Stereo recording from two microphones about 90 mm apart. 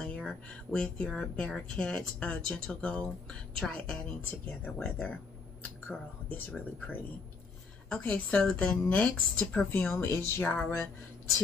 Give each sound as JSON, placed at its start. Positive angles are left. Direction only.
{"t": 0.0, "sound": "speech", "side_deg": 10}
{"t": 4.6, "sound": "music", "side_deg": 20}
{"t": 6.3, "sound": "music", "side_deg": 20}
{"t": 8.0, "sound": "speech", "side_deg": 15}
{"t": 9.9, "sound": "music", "side_deg": 25}